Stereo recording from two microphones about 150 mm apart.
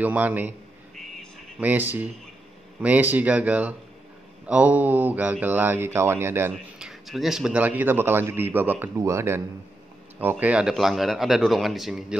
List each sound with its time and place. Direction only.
0.0 s speech: 10° right (ahead or behind)
1.6 s speech: 10° right (ahead or behind)
6.5 s speech: centre (ahead or behind); by 9.4 s 20° right (ahead or behind)
10.4 s speech: 5° right (ahead or behind)